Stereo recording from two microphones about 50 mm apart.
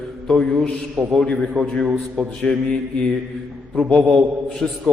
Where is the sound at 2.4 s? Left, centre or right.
Centre.